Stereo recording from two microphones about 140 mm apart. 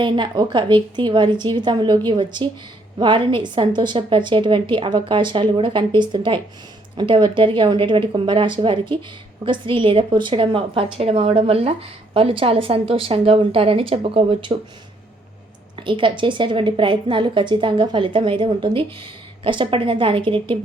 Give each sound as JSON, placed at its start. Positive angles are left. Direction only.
{"t": 0.0, "sound": "speech", "side_deg": -35}
{"t": 15.7, "sound": "speech", "side_deg": -35}